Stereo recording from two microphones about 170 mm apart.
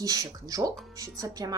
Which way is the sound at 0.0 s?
20° right (ahead or behind).